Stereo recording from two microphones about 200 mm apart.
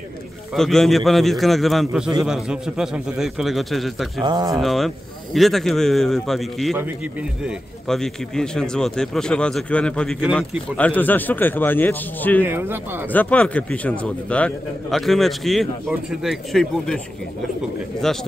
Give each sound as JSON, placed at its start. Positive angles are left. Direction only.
{"t": 0.6, "sound": "a man's voice", "side_deg": 0}
{"t": 4.2, "sound": "speech", "side_deg": -20}
{"t": 4.6, "sound": "a man's voice", "side_deg": 0}
{"t": 12.4, "sound": "speech", "side_deg": -10}
{"t": 13.1, "sound": "a man's voice", "side_deg": 10}